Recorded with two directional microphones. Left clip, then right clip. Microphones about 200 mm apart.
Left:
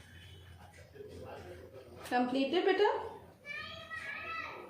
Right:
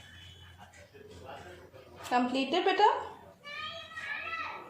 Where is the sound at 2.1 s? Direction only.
40° right (ahead or behind).